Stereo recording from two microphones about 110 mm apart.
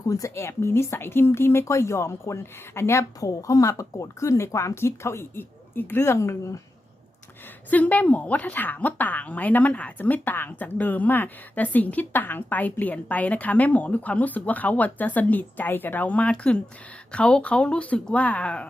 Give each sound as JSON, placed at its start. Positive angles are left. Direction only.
{"t": 0.1, "sound": "speech", "side_deg": 25}
{"t": 7.7, "sound": "speech", "side_deg": 15}